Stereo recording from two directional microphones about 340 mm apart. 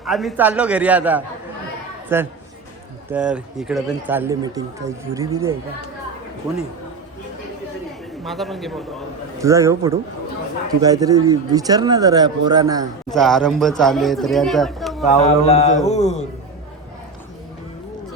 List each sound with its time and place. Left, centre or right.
0.0 s speech: centre
8.2 s speech: centre
13.1 s speech: centre
15.3 s mantra: centre